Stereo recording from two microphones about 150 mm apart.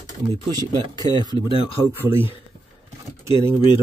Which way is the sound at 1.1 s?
30° left (ahead or behind).